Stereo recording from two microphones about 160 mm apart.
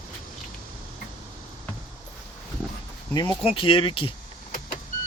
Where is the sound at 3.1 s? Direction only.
25° left (ahead or behind).